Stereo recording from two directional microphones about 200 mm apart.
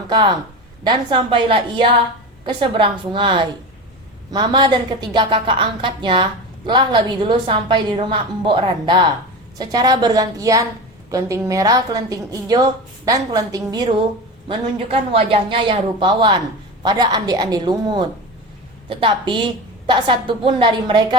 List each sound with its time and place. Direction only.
0.1 s a woman's voice: 20° right (ahead or behind)